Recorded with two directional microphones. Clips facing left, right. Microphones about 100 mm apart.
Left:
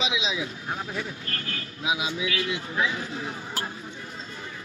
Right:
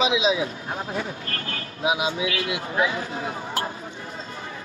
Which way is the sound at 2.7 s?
35° right (ahead or behind).